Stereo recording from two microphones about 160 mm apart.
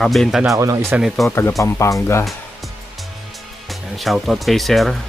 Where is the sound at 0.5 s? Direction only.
20° right (ahead or behind).